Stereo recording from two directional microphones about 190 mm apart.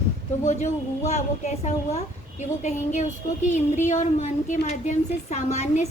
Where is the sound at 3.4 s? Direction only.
40° left (ahead or behind).